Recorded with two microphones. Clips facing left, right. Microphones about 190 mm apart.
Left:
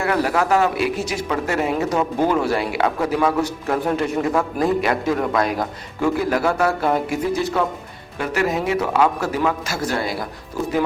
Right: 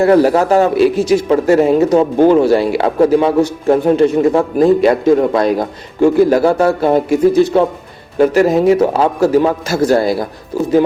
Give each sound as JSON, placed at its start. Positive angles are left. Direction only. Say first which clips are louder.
{"t": 0.0, "sound": "speech", "louder": "right 10 dB", "side_deg": -35}